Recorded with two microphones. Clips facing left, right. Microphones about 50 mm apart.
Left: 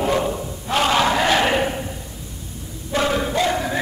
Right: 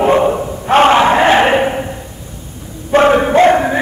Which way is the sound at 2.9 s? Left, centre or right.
Right.